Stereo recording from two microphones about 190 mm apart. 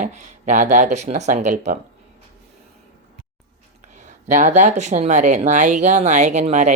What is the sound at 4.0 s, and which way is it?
Speech, 40° right (ahead or behind).